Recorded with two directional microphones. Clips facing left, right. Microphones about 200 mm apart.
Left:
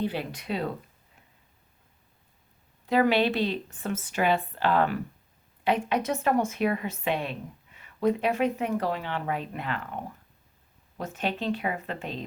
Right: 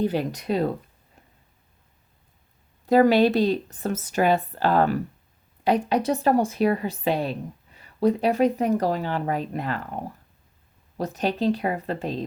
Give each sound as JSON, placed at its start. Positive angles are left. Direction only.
{"t": 0.0, "sound": "a woman's voice", "side_deg": -45}
{"t": 2.8, "sound": "a woman's voice", "side_deg": -40}